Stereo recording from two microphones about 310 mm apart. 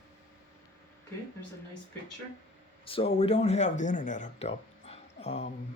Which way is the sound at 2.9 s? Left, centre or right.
Centre.